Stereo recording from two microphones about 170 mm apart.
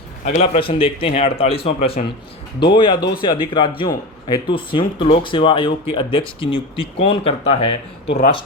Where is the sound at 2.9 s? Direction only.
60° left (ahead or behind).